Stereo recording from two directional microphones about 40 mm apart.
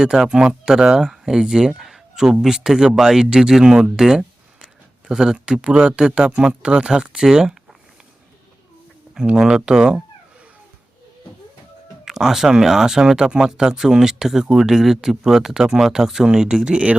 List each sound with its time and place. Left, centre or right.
0.1 s speech: centre
0.9 s speech: centre
4.6 s a sound: centre
5.6 s speech: right
7.3 s a sound: centre
9.1 s speech: centre
12.0 s speech: centre
16.3 s speech: right